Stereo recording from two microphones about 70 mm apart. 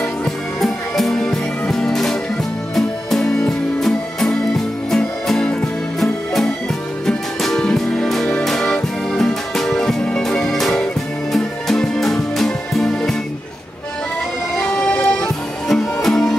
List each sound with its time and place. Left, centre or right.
0.2 s music: centre
14.6 s music: centre
15.7 s music: centre